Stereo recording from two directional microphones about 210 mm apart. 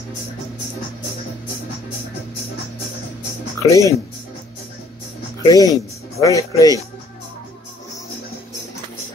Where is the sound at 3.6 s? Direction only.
15° left (ahead or behind).